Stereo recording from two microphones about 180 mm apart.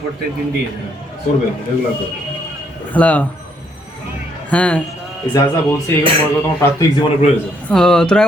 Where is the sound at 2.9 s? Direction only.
10° left (ahead or behind).